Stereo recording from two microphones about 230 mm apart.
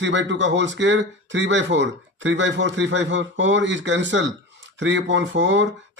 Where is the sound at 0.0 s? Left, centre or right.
Right.